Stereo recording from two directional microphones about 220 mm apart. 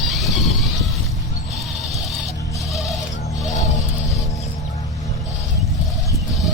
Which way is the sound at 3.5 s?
35° left (ahead or behind).